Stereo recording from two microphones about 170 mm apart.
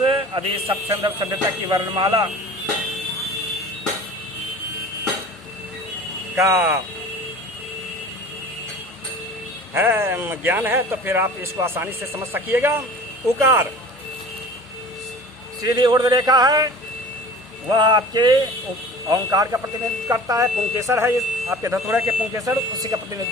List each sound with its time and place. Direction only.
0.0 s a sound: 30° right (ahead or behind)
0.9 s speech: 20° right (ahead or behind)
6.3 s speech: 15° right (ahead or behind)
9.7 s speech: 10° right (ahead or behind)
15.6 s speech: 25° right (ahead or behind)